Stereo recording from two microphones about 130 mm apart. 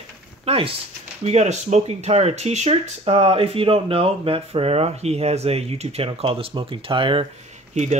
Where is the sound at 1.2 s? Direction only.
60° right (ahead or behind); by 7.2 s 40° right (ahead or behind).